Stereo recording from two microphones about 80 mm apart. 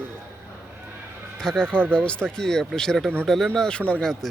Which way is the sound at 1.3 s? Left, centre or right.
Centre.